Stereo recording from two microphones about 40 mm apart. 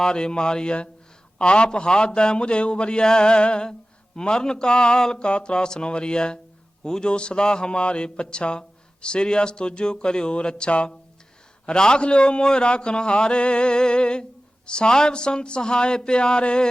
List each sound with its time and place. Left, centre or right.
0.0 s a man's voice: centre